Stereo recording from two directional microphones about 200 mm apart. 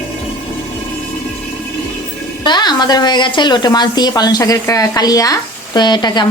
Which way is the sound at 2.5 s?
20° left (ahead or behind).